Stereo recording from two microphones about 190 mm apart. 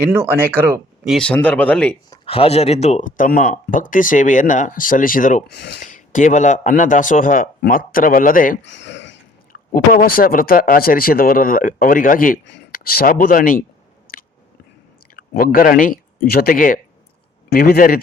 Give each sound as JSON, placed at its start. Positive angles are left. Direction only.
{"t": 0.0, "sound": "speech", "side_deg": -10}
{"t": 1.1, "sound": "speech", "side_deg": 5}
{"t": 2.0, "sound": "speech", "side_deg": 30}
{"t": 5.8, "sound": "speech", "side_deg": 40}
{"t": 8.7, "sound": "a sound", "side_deg": 70}
{"t": 9.5, "sound": "speech", "side_deg": 50}
{"t": 15.1, "sound": "speech", "side_deg": 50}